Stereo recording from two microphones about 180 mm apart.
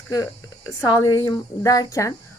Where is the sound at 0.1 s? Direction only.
20° left (ahead or behind).